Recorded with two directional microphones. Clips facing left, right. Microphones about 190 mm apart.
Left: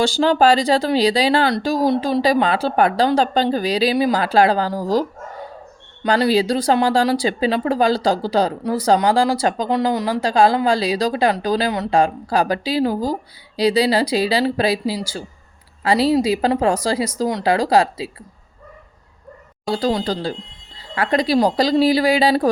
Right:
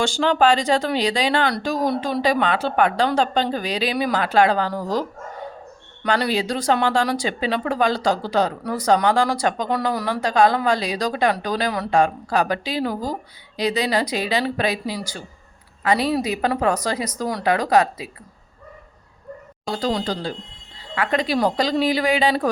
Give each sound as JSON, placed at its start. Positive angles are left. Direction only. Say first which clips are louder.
{"t": 0.0, "sound": "speech", "louder": "left 3 dB", "side_deg": 35}
{"t": 19.7, "sound": "speech", "louder": "left 3 dB", "side_deg": 30}